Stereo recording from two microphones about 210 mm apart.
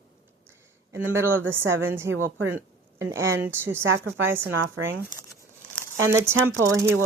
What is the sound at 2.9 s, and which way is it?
A woman's voice, 15° right (ahead or behind).